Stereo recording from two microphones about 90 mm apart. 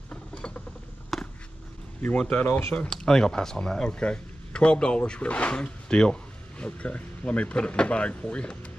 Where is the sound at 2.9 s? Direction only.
5° left (ahead or behind).